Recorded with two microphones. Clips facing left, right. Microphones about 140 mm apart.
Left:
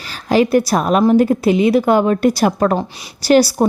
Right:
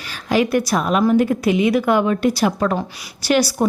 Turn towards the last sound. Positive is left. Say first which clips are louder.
# left 6 dB
turn(degrees=35)  # may be behind; listen again after turning